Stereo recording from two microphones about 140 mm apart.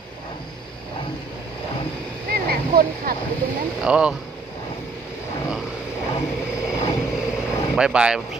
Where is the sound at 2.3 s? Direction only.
90° right.